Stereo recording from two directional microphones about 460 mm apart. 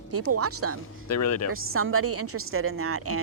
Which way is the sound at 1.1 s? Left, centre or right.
Left.